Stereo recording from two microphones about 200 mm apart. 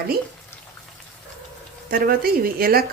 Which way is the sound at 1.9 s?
50° right (ahead or behind).